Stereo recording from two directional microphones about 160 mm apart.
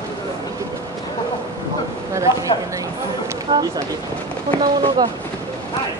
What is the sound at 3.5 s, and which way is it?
Speech, 30° right (ahead or behind).